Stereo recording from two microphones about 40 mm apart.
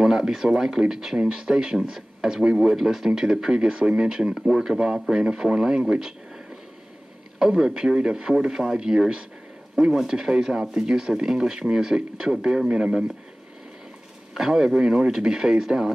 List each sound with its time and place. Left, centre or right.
0.0 s speech: centre
4.7 s speech: centre
7.3 s speech: centre
14.3 s speech: centre